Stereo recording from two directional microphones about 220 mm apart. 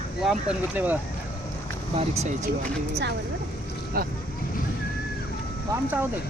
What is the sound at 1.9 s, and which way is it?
Speech, 30° right (ahead or behind).